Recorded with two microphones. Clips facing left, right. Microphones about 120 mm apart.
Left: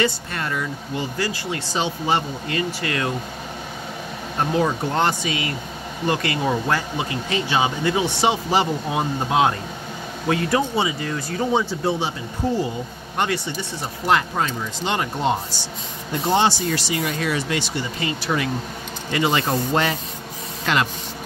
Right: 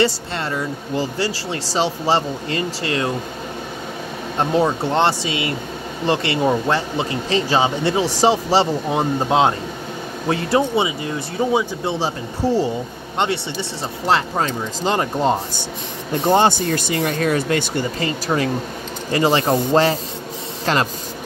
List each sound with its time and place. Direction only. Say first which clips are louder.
0.0 s speech: right 4 dB; 30° right (ahead or behind)
4.6 s speech: right 3 dB; 25° right (ahead or behind)
12.4 s speech: right 4 dB; 30° right (ahead or behind)
16.3 s speech: right 4 dB; 50° right (ahead or behind)